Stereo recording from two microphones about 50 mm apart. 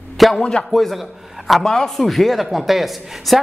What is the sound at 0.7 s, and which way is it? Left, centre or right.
A man's voice, centre.